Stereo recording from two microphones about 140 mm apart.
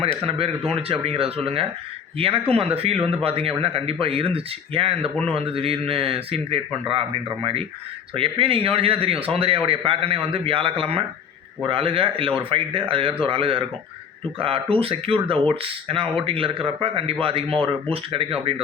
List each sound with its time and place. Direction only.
0.3 s speech: 45° right (ahead or behind)